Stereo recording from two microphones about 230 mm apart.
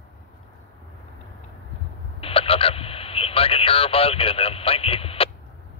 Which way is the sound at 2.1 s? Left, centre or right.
Left.